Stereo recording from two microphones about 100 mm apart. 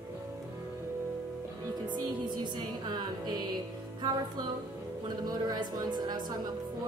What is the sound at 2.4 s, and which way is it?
Music, 45° right (ahead or behind).